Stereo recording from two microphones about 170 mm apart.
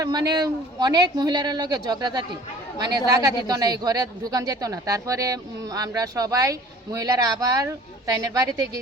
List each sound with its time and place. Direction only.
0.0 s speech: 25° right (ahead or behind)